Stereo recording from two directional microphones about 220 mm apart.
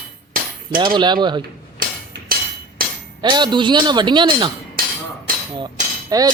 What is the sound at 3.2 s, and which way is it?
A man's voice, 20° right (ahead or behind).